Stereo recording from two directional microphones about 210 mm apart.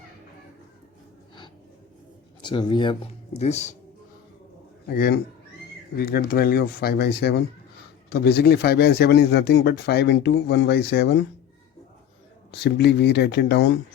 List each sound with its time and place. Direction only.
2.4 s speech: 20° left (ahead or behind)
4.9 s speech: 45° left (ahead or behind)
12.5 s speech: 50° left (ahead or behind)